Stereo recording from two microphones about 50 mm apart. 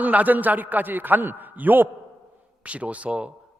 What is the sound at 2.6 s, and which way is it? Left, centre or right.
Speech, right.